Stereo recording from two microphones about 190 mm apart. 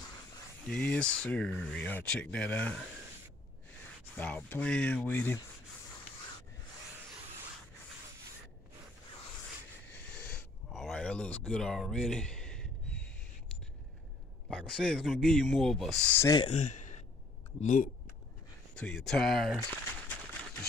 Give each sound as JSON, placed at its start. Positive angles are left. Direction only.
{"t": 0.7, "sound": "speech", "side_deg": 5}
{"t": 4.2, "sound": "speech", "side_deg": 10}
{"t": 9.8, "sound": "a sound", "side_deg": 5}
{"t": 14.7, "sound": "speech", "side_deg": 0}
{"t": 16.3, "sound": "speech", "side_deg": 25}
{"t": 16.5, "sound": "sigh", "side_deg": 40}
{"t": 17.6, "sound": "speech", "side_deg": 40}
{"t": 18.8, "sound": "speech", "side_deg": 5}